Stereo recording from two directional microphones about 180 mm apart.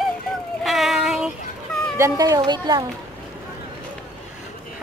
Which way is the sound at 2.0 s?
20° right (ahead or behind).